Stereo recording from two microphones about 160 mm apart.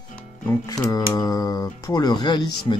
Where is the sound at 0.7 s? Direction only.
20° left (ahead or behind).